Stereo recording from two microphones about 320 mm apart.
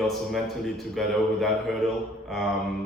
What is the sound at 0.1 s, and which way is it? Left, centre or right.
A man's voice, centre.